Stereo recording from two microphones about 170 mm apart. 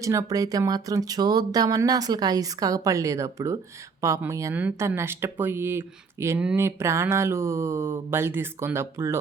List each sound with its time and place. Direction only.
0.0 s speech: 20° right (ahead or behind)